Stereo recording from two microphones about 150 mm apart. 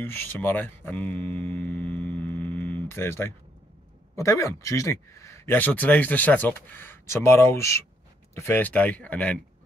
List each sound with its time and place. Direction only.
0.0 s speech: 15° left (ahead or behind)